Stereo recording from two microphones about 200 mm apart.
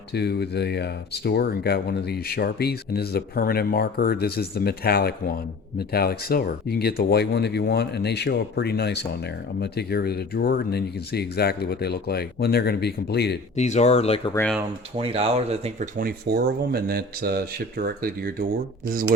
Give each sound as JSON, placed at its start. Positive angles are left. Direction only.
{"t": 0.1, "sound": "speech", "side_deg": 55}
{"t": 13.6, "sound": "speech", "side_deg": 35}
{"t": 14.9, "sound": "speech", "side_deg": -30}